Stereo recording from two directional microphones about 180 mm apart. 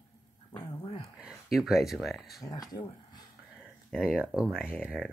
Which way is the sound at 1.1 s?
Centre (ahead or behind).